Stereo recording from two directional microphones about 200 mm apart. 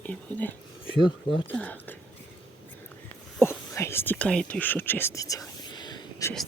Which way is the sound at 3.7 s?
15° left (ahead or behind).